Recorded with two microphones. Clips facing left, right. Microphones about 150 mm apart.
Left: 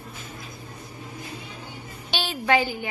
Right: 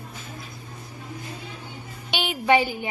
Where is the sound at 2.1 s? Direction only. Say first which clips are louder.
Right 2 dB; 15° right (ahead or behind).